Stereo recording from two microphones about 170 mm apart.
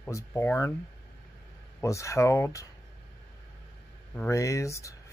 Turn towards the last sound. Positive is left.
turn(degrees=15)  # may be behind; listen again after turning